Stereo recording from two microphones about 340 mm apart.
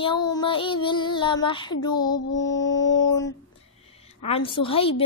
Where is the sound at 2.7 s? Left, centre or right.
Left.